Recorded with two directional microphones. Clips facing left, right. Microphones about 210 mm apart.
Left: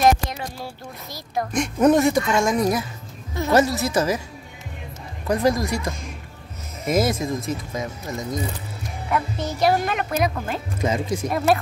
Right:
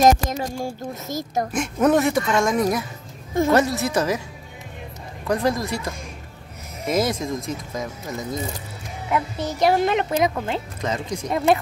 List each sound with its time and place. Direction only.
0.0 s speech: 45° right (ahead or behind)
1.5 s speech: 5° right (ahead or behind)
5.3 s a woman's voice: 10° left (ahead or behind)
6.9 s speech: 10° left (ahead or behind)
9.1 s a woman's voice: 20° right (ahead or behind)
10.8 s a woman's voice: 10° left (ahead or behind)